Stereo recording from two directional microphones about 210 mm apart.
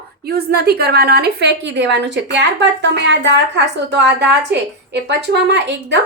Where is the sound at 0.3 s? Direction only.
50° right (ahead or behind).